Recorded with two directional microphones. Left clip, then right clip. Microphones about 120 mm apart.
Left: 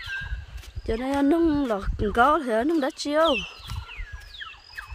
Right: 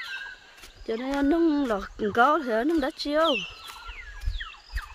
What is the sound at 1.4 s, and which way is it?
Speech, 25° left (ahead or behind).